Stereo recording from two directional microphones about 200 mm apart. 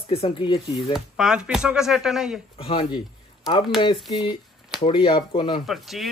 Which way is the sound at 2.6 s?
25° left (ahead or behind).